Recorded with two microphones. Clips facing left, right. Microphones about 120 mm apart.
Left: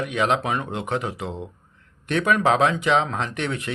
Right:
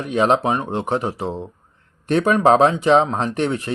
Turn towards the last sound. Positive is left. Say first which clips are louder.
# right 6 dB
turn(degrees=-35)  # may be behind; listen again after turning